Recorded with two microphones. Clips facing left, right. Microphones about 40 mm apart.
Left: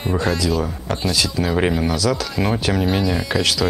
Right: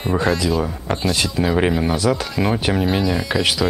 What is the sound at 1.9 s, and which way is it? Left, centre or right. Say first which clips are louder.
Speech: right 1 dB; right.